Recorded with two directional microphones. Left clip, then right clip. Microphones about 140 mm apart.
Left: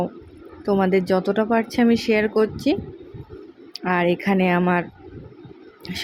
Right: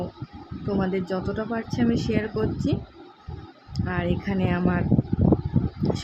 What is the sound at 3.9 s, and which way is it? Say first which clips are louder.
Speech: left 9 dB; 40° left (ahead or behind).